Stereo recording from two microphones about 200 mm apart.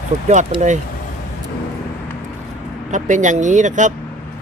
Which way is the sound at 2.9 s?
40° right (ahead or behind).